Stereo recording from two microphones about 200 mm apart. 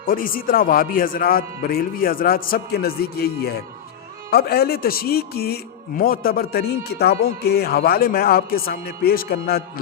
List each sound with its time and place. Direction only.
0.0 s a man's voice: 45° left (ahead or behind)